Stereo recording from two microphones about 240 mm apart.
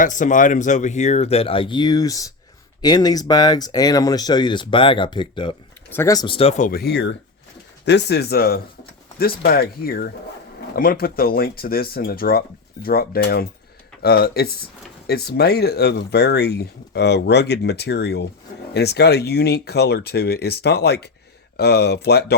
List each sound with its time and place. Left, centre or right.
0.0 s speech: left
6.7 s speech: left